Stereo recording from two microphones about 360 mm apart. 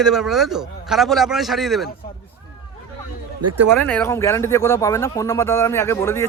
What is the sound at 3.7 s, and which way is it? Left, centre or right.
Speech, centre.